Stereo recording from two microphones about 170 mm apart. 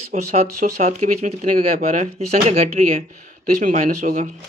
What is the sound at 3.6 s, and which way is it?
Speech, 50° right (ahead or behind).